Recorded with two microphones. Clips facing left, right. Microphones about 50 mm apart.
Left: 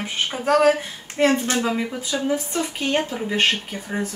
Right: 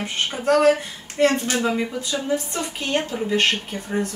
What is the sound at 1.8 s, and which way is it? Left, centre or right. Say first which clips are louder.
A woman's voice: left 1 dB; centre.